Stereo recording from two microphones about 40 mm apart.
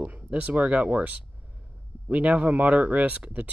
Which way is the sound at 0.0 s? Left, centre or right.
Right.